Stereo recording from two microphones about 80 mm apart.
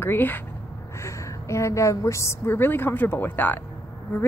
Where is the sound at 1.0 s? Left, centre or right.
Left.